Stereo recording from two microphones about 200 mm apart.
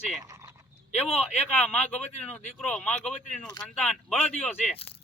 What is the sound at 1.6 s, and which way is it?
Speech, 10° left (ahead or behind).